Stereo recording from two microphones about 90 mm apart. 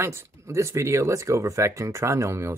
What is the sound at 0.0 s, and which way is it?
Speech, 30° right (ahead or behind).